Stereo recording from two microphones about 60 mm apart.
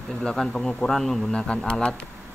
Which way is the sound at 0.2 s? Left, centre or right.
Centre.